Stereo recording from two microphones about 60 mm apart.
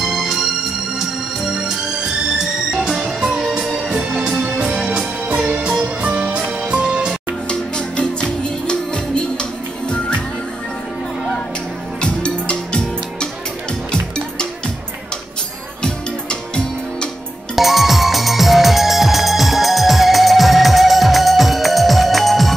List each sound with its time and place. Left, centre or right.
0.0 s music: centre
5.3 s music: right
7.4 s music: centre
12.0 s music: centre
15.8 s music: centre
17.6 s music: centre